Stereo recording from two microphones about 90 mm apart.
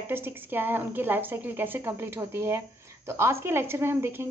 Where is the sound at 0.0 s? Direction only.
25° right (ahead or behind).